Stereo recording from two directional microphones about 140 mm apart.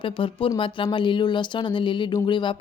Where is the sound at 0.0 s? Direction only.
35° left (ahead or behind).